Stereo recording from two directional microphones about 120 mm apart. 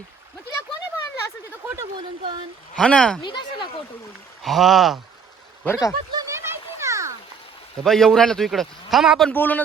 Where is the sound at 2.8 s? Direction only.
5° left (ahead or behind).